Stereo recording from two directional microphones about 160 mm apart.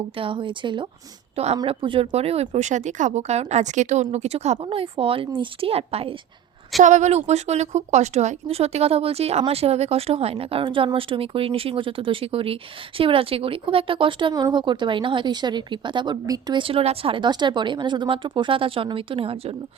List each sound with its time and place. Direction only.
0.2 s a woman's voice: 30° right (ahead or behind)